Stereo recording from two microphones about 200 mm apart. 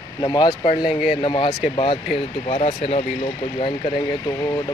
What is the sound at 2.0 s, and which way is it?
Speech, 35° left (ahead or behind).